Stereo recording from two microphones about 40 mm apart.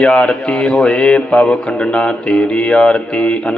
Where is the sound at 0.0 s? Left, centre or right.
Left.